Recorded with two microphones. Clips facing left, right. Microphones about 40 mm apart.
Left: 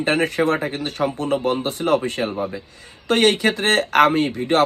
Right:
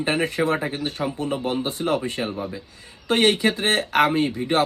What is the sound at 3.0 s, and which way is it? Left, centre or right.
Speech, left.